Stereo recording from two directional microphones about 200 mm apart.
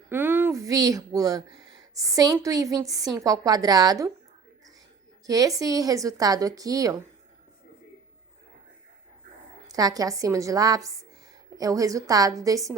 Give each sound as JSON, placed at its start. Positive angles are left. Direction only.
{"t": 0.1, "sound": "a sound", "side_deg": -10}
{"t": 2.0, "sound": "a woman's voice", "side_deg": -15}
{"t": 5.2, "sound": "a woman's voice", "side_deg": -20}
{"t": 9.6, "sound": "a woman's voice", "side_deg": -20}